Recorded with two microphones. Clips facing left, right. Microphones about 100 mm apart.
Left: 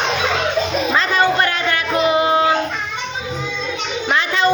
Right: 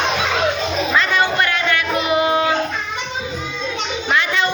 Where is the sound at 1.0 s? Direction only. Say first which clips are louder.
Left 2 dB; 35° left (ahead or behind).